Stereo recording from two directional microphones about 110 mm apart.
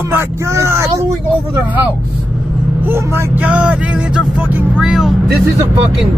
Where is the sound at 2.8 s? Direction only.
20° right (ahead or behind); by 5.1 s 5° right (ahead or behind).